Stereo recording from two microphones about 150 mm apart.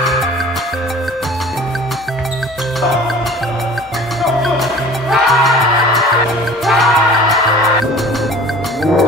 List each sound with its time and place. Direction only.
0.0 s music: centre (ahead or behind)
4.2 s music: centre (ahead or behind)